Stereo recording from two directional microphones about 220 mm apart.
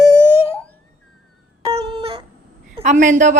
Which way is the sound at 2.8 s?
35° right (ahead or behind).